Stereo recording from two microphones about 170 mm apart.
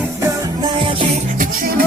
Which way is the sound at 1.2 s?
50° right (ahead or behind).